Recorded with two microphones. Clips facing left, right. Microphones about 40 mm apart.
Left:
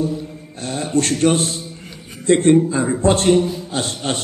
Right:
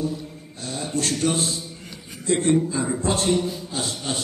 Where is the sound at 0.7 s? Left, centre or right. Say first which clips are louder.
Left 7 dB; left.